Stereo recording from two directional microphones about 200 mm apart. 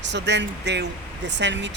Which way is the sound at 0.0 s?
60° right (ahead or behind).